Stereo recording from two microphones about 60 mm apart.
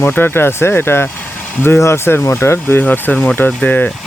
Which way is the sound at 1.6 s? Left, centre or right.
Left.